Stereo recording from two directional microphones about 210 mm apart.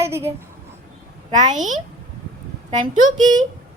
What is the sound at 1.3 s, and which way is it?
A woman's voice, 35° right (ahead or behind).